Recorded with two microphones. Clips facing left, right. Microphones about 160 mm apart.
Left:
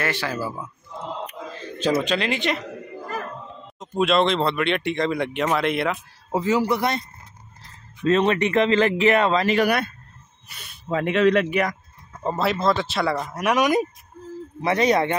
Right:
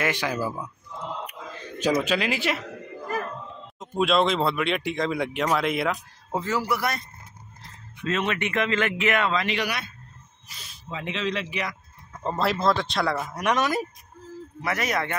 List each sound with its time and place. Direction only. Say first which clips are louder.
0.0 s speech: even; 15° right (ahead or behind)
0.4 s a man's voice: even; 5° left (ahead or behind)
1.8 s speech: left 1 dB; 10° right (ahead or behind)
3.8 s speech: left 2 dB; centre (ahead or behind)
6.3 s a man's voice: left 5 dB; 15° left (ahead or behind)
8.0 s speech: left 8 dB; 35° left (ahead or behind); by 11.7 s 55° left (ahead or behind)
12.2 s speech: left 2 dB; centre (ahead or behind)
14.6 s speech: left 8 dB; 25° left (ahead or behind)